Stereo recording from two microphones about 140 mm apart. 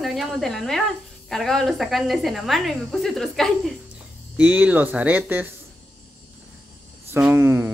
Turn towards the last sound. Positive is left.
turn(degrees=-15)  # may be behind; listen again after turning